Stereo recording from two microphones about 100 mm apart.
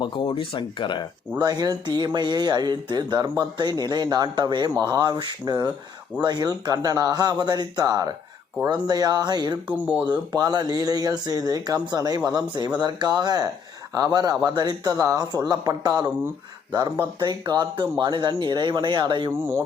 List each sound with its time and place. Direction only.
0.0 s speech: 55° left (ahead or behind)
1.4 s speech: 40° right (ahead or behind)
9.6 s speech: 10° right (ahead or behind)
10.1 s speech: 40° right (ahead or behind)
19.3 s speech: 25° right (ahead or behind)